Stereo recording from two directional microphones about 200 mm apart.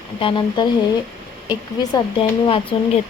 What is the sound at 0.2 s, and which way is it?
Speech, 25° left (ahead or behind).